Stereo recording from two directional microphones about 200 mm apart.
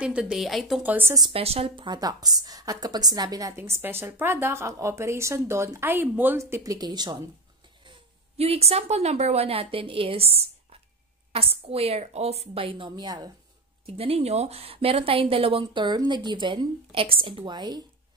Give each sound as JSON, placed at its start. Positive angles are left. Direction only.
{"t": 0.0, "sound": "a woman's voice", "side_deg": -5}
{"t": 1.3, "sound": "a woman's voice", "side_deg": -30}